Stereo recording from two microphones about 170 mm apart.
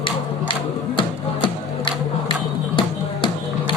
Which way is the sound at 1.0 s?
30° left (ahead or behind).